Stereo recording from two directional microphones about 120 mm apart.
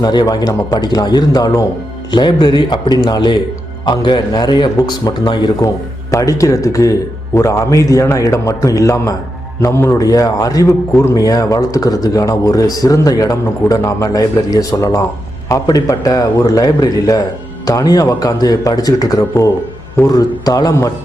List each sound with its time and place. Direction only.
0.0 s a man's voice: 35° left (ahead or behind)